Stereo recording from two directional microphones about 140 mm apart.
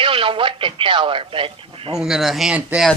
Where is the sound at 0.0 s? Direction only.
40° right (ahead or behind).